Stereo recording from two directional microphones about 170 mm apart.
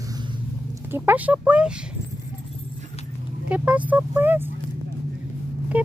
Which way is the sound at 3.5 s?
10° right (ahead or behind).